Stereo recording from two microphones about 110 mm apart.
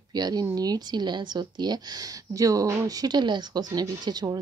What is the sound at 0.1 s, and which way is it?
A woman's voice, 35° right (ahead or behind).